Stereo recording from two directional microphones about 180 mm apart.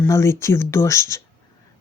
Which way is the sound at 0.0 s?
15° left (ahead or behind).